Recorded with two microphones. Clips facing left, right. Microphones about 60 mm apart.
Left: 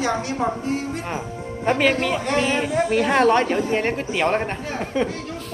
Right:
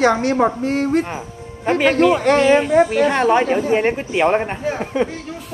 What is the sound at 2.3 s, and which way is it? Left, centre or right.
Speech, right.